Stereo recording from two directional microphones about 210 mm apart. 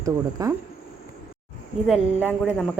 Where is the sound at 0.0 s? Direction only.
15° right (ahead or behind).